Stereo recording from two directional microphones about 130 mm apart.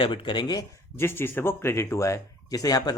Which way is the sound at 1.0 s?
15° left (ahead or behind).